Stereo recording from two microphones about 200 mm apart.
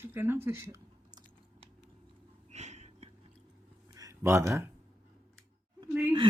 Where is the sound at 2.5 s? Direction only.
35° right (ahead or behind).